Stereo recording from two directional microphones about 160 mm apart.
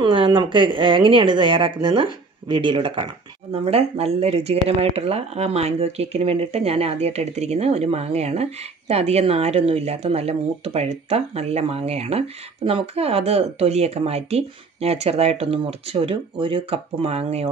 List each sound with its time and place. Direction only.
0.0 s speech: 30° right (ahead or behind)